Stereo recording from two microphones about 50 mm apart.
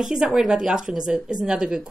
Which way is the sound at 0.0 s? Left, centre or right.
Centre.